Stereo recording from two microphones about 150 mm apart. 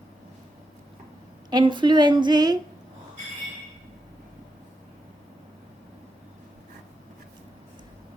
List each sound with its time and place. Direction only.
1.5 s a woman's voice: 30° right (ahead or behind)